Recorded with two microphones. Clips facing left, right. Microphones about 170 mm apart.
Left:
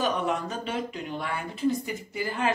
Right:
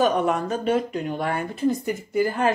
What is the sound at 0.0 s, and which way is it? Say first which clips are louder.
Speech: right 6 dB; 50° right (ahead or behind).